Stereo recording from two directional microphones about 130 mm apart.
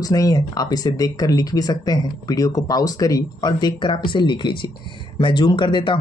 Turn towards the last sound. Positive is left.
turn(degrees=40)  # may be behind; listen again after turning